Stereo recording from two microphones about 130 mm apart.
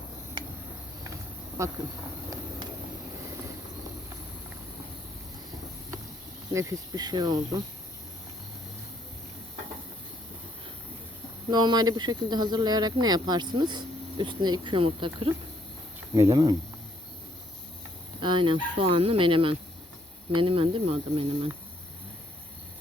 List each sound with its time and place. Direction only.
1.6 s speech: 25° right (ahead or behind)
6.5 s speech: 25° right (ahead or behind)
11.5 s speech: 35° right (ahead or behind)
16.1 s speech: 30° right (ahead or behind)
18.2 s speech: 40° right (ahead or behind)